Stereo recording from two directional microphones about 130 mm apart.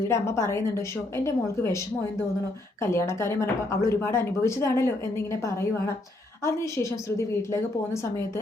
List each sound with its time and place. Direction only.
0.1 s a woman's voice: 20° left (ahead or behind)
2.8 s a woman's voice: 20° left (ahead or behind)